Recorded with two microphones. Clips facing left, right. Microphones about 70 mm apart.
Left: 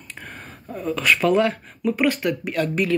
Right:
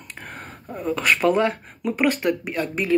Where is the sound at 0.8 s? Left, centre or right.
Right.